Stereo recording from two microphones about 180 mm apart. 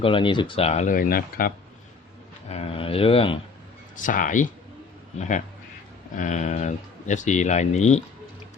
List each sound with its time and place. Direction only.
0.0 s speech: 30° left (ahead or behind); by 1.5 s 55° left (ahead or behind)
2.5 s speech: 35° left (ahead or behind)
3.9 s speech: 45° left (ahead or behind)